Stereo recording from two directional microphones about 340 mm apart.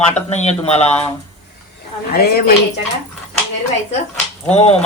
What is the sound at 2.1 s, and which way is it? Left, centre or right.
Speech, left.